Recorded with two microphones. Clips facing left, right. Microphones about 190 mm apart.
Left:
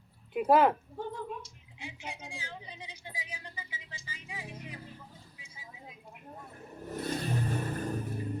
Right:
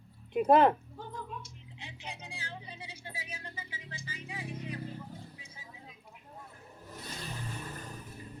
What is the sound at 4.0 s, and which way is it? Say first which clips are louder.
Music: right 3 dB; 15° left (ahead or behind).